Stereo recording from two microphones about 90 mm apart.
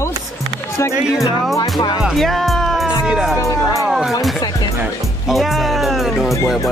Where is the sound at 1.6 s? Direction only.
55° left (ahead or behind).